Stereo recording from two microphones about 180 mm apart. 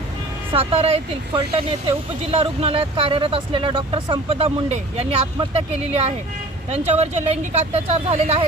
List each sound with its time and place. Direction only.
0.5 s speech: 35° right (ahead or behind)